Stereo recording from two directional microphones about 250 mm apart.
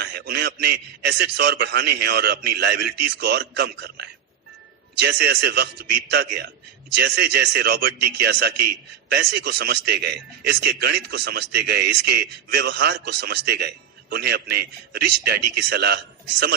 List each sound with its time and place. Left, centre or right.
0.0 s a man's voice: right